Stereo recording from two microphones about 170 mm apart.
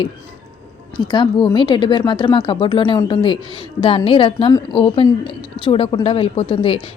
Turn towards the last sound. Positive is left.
turn(degrees=30)  # may be behind; listen again after turning